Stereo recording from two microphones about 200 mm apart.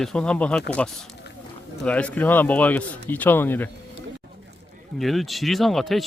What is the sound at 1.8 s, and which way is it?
Speech, 5° left (ahead or behind).